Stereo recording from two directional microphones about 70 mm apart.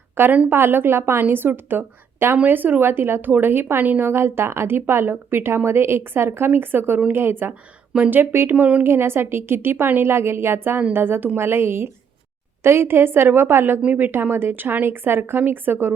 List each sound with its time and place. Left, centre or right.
0.2 s a woman's voice: right
8.9 s a woman's voice: right